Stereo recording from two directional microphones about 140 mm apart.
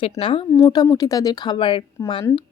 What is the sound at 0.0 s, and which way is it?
Speech, 40° left (ahead or behind).